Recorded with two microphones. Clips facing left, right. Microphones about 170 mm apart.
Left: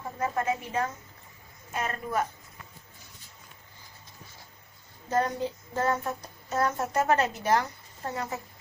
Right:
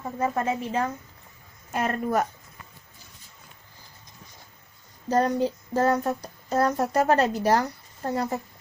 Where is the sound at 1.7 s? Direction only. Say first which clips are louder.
Right 6 dB; 50° right (ahead or behind).